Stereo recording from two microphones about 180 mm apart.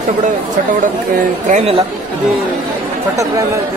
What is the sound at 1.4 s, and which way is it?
Speech, 45° right (ahead or behind).